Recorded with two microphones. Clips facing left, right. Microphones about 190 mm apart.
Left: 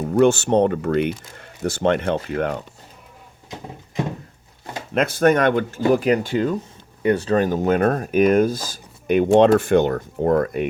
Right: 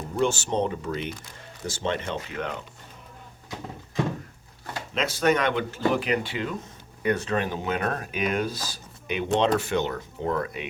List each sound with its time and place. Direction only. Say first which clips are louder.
0.0 s speech: left 9 dB; 60° left (ahead or behind)
2.3 s speech: left 9 dB; 40° left (ahead or behind)
4.9 s speech: left 7 dB; 55° left (ahead or behind)
7.0 s speech: left 7 dB; 30° left (ahead or behind); by 10.7 s 50° left (ahead or behind)